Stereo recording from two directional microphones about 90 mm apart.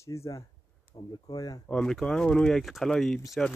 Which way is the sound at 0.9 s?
55° left (ahead or behind).